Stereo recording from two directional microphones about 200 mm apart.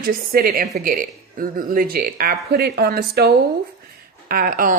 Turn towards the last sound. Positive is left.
turn(degrees=-45)  # may be behind; listen again after turning